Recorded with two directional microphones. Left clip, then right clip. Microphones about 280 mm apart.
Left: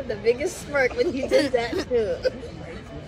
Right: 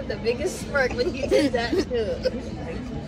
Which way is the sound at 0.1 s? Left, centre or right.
Left.